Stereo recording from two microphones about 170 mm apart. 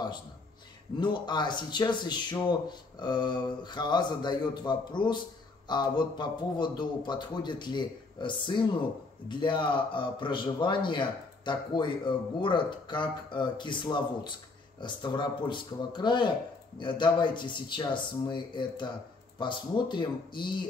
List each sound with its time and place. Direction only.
0.9 s a man's voice: 25° left (ahead or behind)